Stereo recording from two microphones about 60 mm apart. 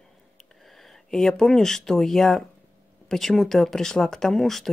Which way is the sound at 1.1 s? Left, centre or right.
Centre.